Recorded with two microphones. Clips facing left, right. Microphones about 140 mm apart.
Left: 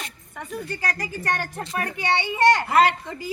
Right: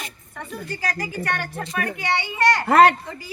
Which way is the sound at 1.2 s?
40° left (ahead or behind).